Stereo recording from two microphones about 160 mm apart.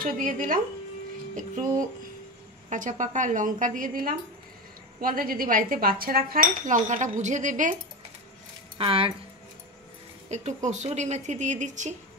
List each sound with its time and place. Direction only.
0.0 s a woman's voice: 60° right (ahead or behind)
2.7 s a woman's voice: 50° right (ahead or behind)
8.7 s speech: 35° right (ahead or behind)
10.3 s a woman's voice: 45° right (ahead or behind)